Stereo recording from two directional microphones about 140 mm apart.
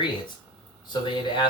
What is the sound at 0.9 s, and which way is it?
Speech, 35° left (ahead or behind).